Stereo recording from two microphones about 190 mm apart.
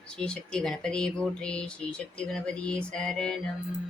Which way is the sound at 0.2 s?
5° left (ahead or behind).